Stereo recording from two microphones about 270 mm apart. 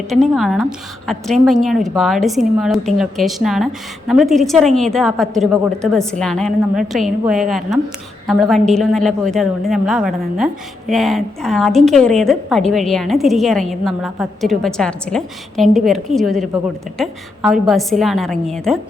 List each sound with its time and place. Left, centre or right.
0.1 s a woman's voice: centre